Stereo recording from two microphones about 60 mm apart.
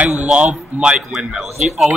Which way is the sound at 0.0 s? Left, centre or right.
Right.